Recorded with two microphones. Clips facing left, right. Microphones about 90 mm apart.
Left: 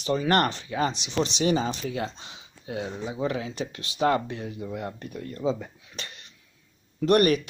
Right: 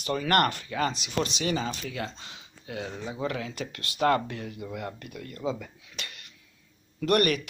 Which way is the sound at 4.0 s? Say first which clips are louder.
Left 1 dB; 25° left (ahead or behind).